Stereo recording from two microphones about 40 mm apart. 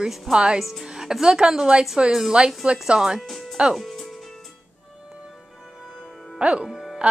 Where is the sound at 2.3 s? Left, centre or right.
Right.